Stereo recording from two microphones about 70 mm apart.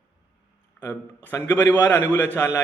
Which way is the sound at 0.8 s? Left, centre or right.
Left.